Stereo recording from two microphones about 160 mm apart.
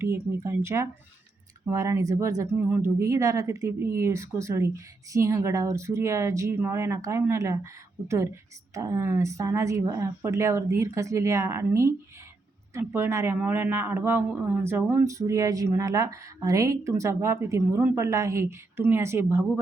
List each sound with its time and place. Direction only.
0.0 s speech: 15° right (ahead or behind)